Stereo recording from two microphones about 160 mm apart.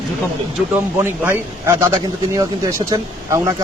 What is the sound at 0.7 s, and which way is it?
A man's voice, 15° right (ahead or behind).